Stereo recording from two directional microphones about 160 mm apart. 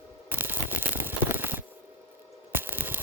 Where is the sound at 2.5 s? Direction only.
10° right (ahead or behind).